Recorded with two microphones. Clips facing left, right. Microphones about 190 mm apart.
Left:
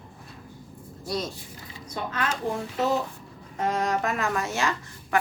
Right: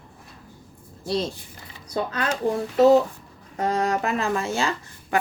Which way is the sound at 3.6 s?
35° right (ahead or behind).